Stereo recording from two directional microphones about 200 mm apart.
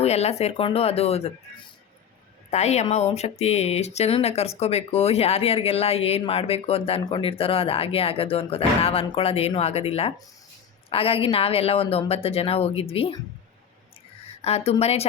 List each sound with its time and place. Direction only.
0.0 s speech: 30° left (ahead or behind)
2.5 s a woman's voice: 35° left (ahead or behind)
14.4 s speech: 30° left (ahead or behind)